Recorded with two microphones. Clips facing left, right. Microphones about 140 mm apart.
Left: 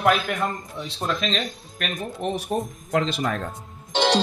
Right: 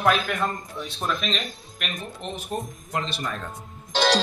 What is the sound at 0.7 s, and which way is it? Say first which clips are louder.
Speech: left 1 dB; 25° left (ahead or behind).